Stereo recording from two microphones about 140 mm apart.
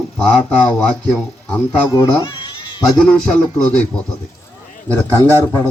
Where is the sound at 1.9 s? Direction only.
30° left (ahead or behind).